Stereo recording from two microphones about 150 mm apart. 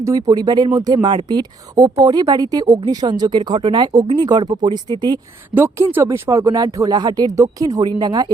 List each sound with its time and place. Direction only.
0.0 s speech: 25° right (ahead or behind)
5.5 s speech: 15° right (ahead or behind)